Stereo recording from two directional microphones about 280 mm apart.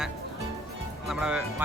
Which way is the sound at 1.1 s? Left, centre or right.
Centre.